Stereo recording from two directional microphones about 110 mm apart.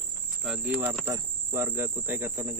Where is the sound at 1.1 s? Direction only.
20° right (ahead or behind).